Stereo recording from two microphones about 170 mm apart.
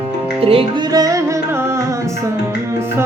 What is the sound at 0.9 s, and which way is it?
Music, 20° right (ahead or behind).